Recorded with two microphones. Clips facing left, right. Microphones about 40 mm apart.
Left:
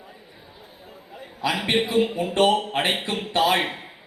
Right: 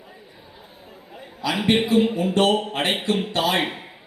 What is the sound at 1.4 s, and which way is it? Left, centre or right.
A man's voice, left.